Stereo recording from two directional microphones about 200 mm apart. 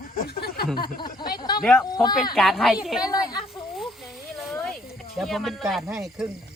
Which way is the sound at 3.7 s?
Centre (ahead or behind).